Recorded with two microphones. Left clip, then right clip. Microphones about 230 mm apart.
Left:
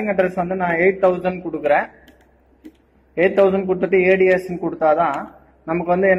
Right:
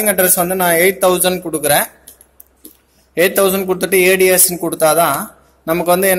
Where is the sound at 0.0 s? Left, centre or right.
Right.